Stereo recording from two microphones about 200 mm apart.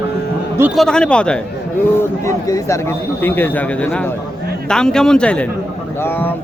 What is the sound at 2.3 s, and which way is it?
Speech, 15° left (ahead or behind).